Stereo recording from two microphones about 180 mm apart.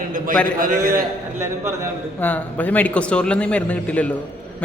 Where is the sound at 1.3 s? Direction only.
15° right (ahead or behind).